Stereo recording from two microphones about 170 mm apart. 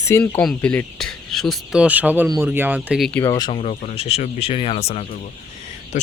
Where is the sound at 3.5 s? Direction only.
40° left (ahead or behind).